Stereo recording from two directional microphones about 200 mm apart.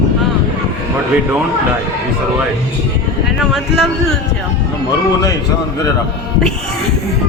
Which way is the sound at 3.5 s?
Centre (ahead or behind).